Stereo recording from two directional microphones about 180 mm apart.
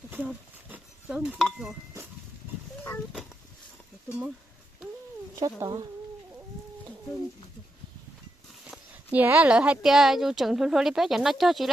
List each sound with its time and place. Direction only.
0.1 s chink: 10° right (ahead or behind)
5.4 s speech: 20° right (ahead or behind)
8.6 s speech: 10° right (ahead or behind)